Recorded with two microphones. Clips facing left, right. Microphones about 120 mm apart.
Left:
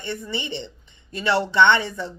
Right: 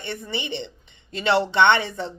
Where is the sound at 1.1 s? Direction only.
20° right (ahead or behind).